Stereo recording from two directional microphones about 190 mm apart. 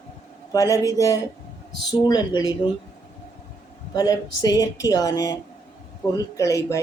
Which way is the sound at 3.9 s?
20° left (ahead or behind).